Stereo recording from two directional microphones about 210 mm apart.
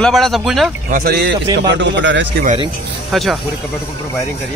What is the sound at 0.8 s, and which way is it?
Speech, 45° right (ahead or behind).